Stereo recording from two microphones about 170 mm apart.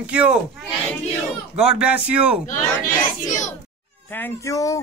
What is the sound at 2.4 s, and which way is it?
A child's voice, 50° left (ahead or behind).